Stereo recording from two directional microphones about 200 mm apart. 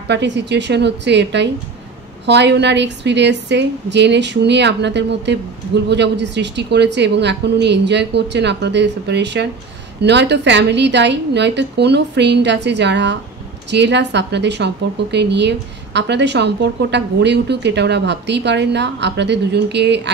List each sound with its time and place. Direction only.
0.1 s a woman's voice: 60° right (ahead or behind)